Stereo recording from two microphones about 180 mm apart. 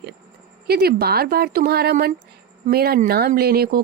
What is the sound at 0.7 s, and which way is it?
Speech, 60° right (ahead or behind).